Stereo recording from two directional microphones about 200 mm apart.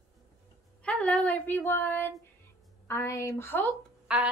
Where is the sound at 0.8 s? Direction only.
5° left (ahead or behind).